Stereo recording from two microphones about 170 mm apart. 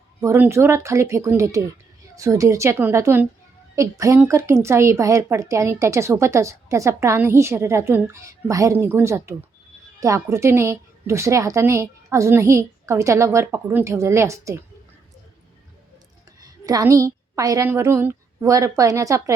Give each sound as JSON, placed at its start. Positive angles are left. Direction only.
{"t": 0.2, "sound": "a woman's voice", "side_deg": -15}
{"t": 16.4, "sound": "a woman's voice", "side_deg": -20}